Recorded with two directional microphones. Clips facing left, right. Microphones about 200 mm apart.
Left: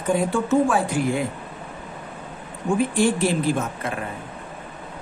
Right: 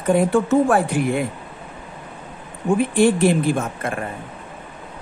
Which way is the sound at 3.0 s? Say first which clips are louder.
Right 4 dB; 60° right (ahead or behind).